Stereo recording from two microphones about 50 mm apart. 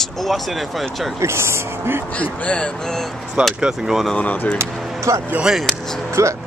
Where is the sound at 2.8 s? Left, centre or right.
Centre.